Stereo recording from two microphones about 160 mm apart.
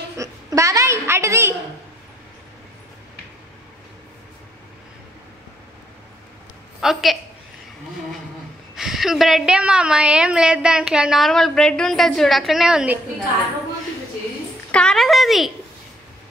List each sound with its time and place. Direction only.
0.2 s a sound: 20° right (ahead or behind)
6.8 s a woman's voice: centre (ahead or behind)
8.7 s a woman's voice: centre (ahead or behind)
14.7 s a woman's voice: 5° left (ahead or behind)